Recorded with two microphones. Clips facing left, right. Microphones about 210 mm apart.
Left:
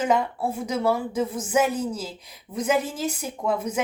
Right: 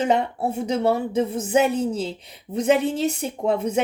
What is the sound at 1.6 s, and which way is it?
Speech, 65° right (ahead or behind).